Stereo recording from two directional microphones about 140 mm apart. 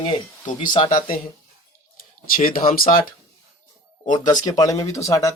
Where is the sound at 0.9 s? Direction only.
85° left.